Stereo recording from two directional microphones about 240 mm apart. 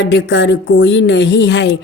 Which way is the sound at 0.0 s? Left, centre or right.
Left.